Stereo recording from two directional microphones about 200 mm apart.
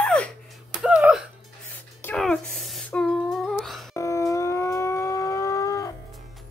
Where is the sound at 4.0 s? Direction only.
15° left (ahead or behind).